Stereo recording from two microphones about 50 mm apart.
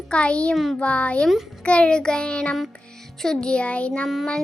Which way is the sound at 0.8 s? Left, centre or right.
Left.